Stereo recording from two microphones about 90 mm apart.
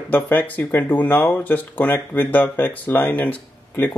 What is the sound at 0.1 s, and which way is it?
Speech, 20° left (ahead or behind).